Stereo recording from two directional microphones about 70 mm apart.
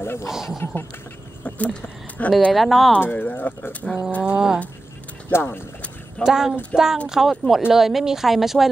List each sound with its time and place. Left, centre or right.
0.0 s speech: left
0.3 s speech: centre
1.4 s a sound: centre
2.5 s speech: centre
3.0 s speech: left
4.2 s speech: centre
5.3 s speech: left
6.2 s speech: centre